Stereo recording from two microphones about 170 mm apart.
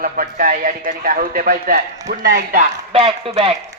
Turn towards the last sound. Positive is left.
turn(degrees=-35)  # may be behind; listen again after turning